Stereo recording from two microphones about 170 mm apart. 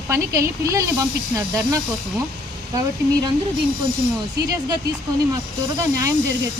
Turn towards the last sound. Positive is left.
turn(degrees=-20)  # may be behind; listen again after turning